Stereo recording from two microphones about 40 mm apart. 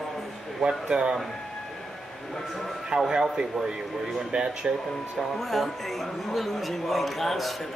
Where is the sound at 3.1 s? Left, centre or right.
Centre.